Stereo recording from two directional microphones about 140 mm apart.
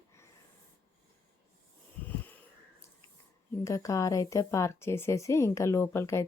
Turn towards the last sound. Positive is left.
turn(degrees=20)  # may be behind; listen again after turning